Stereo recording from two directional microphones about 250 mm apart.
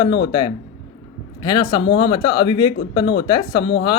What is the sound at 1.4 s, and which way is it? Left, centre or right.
Speech, centre.